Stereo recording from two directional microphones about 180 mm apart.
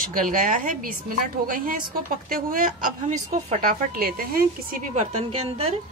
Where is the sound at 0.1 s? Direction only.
50° right (ahead or behind).